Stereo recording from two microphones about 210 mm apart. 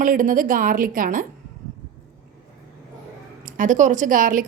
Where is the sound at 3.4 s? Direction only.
40° right (ahead or behind).